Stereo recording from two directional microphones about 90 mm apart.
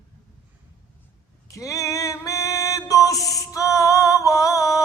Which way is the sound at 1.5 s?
40° left (ahead or behind).